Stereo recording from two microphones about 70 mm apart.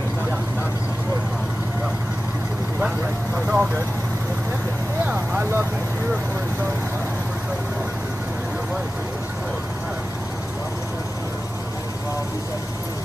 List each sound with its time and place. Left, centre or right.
3.3 s vehicle: centre
5.0 s vehicle: right